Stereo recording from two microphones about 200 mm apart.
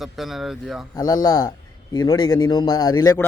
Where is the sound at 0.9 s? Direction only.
20° left (ahead or behind).